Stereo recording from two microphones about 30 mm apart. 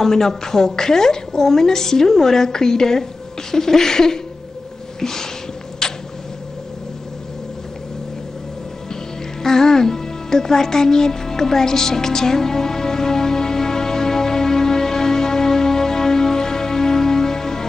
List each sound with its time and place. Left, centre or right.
0.0 s a woman's voice: centre
5.8 s a sound: centre
9.4 s music: centre